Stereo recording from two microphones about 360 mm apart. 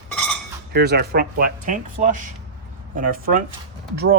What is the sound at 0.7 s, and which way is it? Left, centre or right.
Speech, right.